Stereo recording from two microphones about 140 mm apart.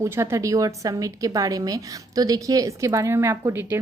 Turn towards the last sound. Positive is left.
turn(degrees=-15)  # may be behind; listen again after turning